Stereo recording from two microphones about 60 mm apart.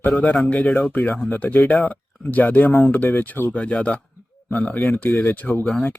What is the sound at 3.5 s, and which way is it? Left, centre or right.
Speech, left.